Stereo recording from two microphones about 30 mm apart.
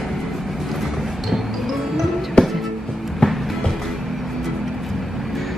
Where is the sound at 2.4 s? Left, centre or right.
Left.